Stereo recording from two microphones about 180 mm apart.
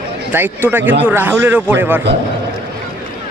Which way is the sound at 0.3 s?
10° right (ahead or behind).